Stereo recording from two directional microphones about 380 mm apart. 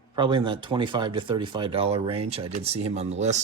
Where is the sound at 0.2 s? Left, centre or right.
Centre.